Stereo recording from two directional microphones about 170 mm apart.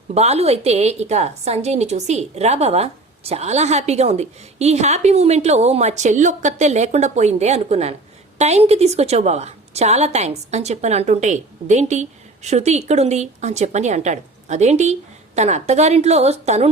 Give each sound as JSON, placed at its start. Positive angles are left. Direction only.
{"t": 0.1, "sound": "a woman's voice", "side_deg": -40}